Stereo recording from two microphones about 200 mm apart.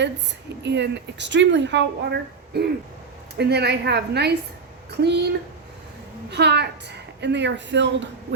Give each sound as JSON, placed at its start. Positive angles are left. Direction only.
{"t": 0.6, "sound": "speech", "side_deg": -60}
{"t": 6.3, "sound": "speech", "side_deg": -55}